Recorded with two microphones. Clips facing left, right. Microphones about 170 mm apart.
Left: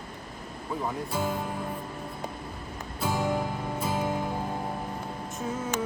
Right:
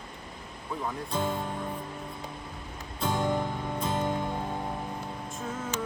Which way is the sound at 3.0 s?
5° left (ahead or behind).